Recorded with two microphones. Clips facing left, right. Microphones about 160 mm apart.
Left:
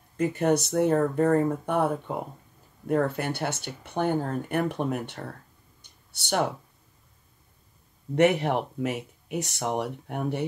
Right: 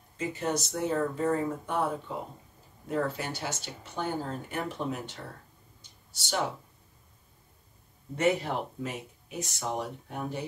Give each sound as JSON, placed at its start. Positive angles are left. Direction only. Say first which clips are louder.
{"t": 0.2, "sound": "speech", "louder": "left 8 dB", "side_deg": 60}
{"t": 2.9, "sound": "speech", "louder": "left 6 dB", "side_deg": 60}
{"t": 5.8, "sound": "a sound", "louder": "left 1 dB", "side_deg": 65}
{"t": 8.2, "sound": "speech", "louder": "left 5 dB", "side_deg": 65}